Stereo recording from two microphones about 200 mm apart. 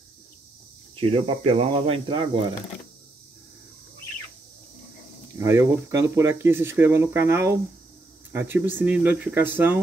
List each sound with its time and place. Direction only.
0.9 s speech: 30° right (ahead or behind)
5.4 s speech: 15° right (ahead or behind)